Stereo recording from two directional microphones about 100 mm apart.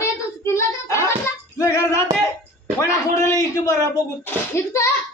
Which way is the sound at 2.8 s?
30° left (ahead or behind).